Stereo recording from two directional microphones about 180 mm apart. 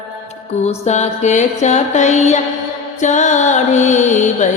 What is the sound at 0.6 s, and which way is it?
Music, 40° left (ahead or behind).